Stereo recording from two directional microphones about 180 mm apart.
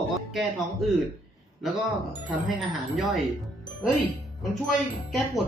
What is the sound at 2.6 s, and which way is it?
Speech, centre (ahead or behind).